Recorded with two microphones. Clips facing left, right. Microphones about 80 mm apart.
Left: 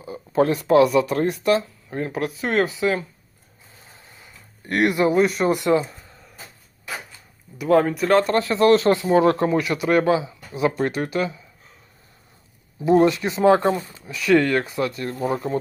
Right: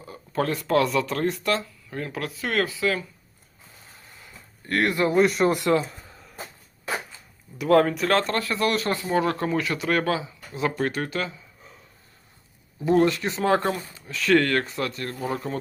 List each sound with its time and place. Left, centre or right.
0.0 s speech: centre
4.6 s speech: centre
5.1 s speech: centre
7.6 s speech: centre
8.3 s speech: left
9.5 s speech: centre
12.8 s speech: centre
15.1 s speech: left